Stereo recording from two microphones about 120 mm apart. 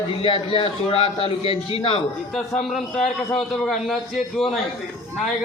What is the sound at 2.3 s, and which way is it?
A man's voice, 5° left (ahead or behind).